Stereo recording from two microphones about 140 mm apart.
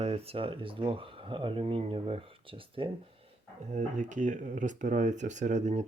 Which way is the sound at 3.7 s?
60° right (ahead or behind).